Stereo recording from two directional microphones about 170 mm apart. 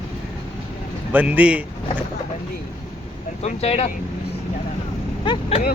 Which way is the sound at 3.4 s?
40° left (ahead or behind).